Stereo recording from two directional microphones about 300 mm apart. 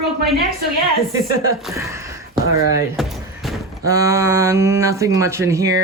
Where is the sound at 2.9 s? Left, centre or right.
Centre.